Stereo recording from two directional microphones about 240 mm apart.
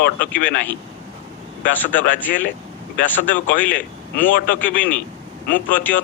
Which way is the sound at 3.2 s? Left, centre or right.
Left.